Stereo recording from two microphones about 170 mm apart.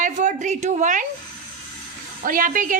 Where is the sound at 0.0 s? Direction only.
45° right (ahead or behind).